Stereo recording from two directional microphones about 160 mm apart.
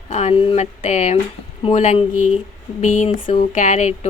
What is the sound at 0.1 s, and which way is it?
A woman's voice, 40° left (ahead or behind).